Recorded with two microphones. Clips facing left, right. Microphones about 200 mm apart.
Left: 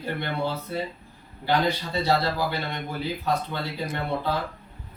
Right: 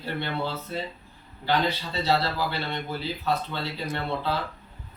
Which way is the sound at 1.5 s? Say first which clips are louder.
Left 2 dB; 15° left (ahead or behind).